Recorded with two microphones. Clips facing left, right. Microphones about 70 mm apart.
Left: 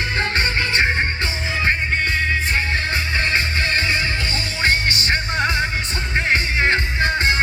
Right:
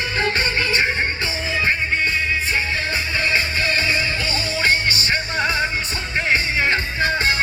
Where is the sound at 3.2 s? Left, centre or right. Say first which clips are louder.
Right 1 dB; left.